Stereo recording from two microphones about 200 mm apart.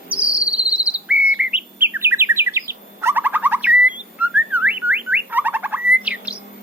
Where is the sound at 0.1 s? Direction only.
5° right (ahead or behind).